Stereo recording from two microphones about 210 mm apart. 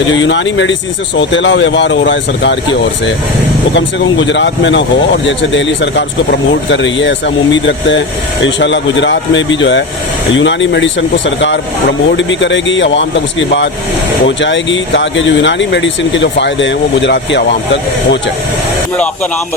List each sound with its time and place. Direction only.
0.1 s speech: 65° left (ahead or behind)
3.8 s speech: 60° left (ahead or behind)
14.3 s speech: 60° left (ahead or behind)